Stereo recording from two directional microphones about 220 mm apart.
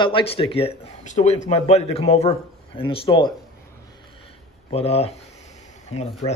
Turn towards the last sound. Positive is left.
turn(degrees=25)  # may be behind; listen again after turning